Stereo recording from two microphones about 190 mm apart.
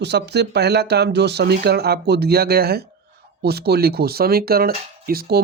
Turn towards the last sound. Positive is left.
turn(degrees=-50)  # may be behind; listen again after turning